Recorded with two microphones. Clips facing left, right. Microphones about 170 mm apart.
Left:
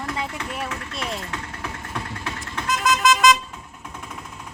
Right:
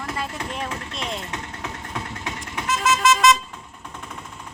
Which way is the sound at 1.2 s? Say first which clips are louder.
Even; 20° right (ahead or behind).